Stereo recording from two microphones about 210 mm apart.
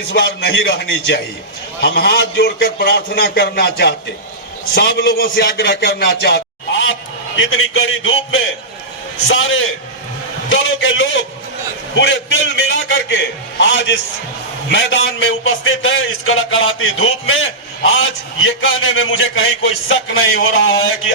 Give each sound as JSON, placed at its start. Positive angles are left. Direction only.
{"t": 0.1, "sound": "a man's voice", "side_deg": 50}
{"t": 7.3, "sound": "a man's voice", "side_deg": 65}
{"t": 10.5, "sound": "a sound", "side_deg": 65}
{"t": 11.9, "sound": "a man's voice", "side_deg": 60}